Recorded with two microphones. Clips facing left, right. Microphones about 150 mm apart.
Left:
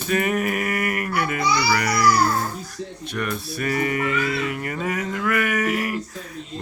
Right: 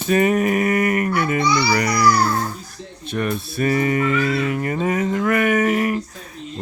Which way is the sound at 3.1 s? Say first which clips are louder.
Right 5 dB; 25° right (ahead or behind).